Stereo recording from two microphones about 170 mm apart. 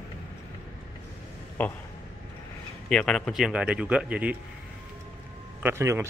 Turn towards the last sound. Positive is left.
turn(degrees=-15)  # may be behind; listen again after turning